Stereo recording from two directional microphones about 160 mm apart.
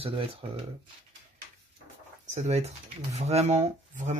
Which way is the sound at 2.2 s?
45° right (ahead or behind).